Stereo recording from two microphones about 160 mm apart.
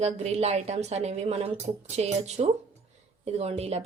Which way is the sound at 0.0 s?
45° right (ahead or behind).